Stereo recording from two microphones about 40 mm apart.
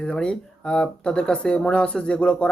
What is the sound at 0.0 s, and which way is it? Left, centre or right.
Speech, left.